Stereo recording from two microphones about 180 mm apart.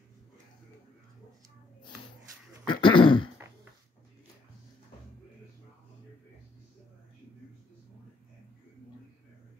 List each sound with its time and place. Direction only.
2.6 s throat clearing: 25° left (ahead or behind)